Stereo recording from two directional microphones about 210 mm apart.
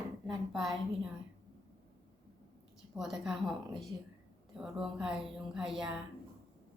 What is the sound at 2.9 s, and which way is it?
A woman's voice, centre (ahead or behind).